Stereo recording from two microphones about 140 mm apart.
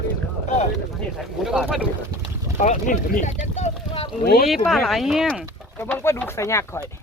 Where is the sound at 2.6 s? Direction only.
65° left (ahead or behind).